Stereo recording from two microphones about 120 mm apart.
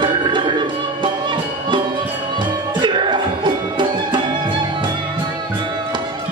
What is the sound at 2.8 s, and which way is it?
Music, 40° right (ahead or behind).